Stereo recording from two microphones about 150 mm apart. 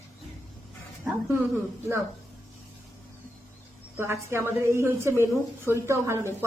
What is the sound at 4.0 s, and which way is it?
A woman's voice, 15° right (ahead or behind).